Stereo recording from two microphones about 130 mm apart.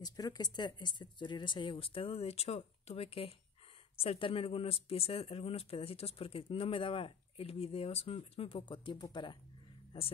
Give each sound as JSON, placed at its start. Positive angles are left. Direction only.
{"t": 0.0, "sound": "speech", "side_deg": 30}